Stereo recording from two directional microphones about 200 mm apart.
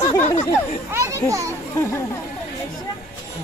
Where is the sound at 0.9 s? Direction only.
15° right (ahead or behind).